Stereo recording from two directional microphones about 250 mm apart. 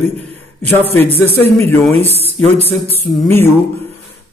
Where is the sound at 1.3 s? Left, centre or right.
Centre.